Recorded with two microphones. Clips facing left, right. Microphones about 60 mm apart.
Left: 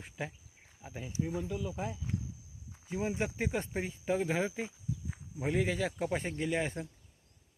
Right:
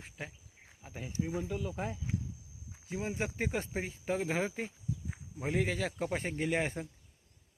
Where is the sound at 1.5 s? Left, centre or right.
Right.